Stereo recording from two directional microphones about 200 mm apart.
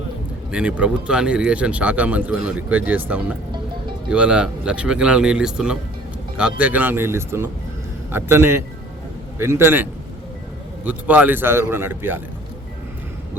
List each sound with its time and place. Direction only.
0.5 s a man's voice: 5° right (ahead or behind)